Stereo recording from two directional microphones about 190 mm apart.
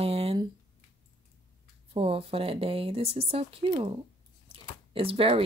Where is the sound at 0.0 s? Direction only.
30° right (ahead or behind).